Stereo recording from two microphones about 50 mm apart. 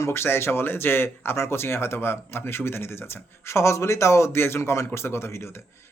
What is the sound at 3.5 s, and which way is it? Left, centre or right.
Speech, left.